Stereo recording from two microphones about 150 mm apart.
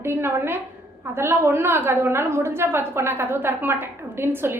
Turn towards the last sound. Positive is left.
turn(degrees=-15)  # may be behind; listen again after turning